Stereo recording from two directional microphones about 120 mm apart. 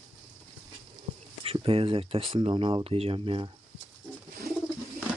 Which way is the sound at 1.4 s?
50° right (ahead or behind).